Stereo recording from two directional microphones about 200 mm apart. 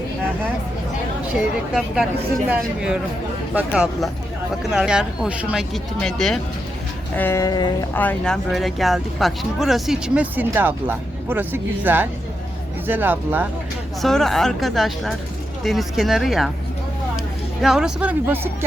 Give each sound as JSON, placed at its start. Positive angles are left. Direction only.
{"t": 2.5, "sound": "speech", "side_deg": -5}
{"t": 7.2, "sound": "speech", "side_deg": 15}
{"t": 7.9, "sound": "speech", "side_deg": 5}
{"t": 14.0, "sound": "speech", "side_deg": 0}
{"t": 17.6, "sound": "speech", "side_deg": 0}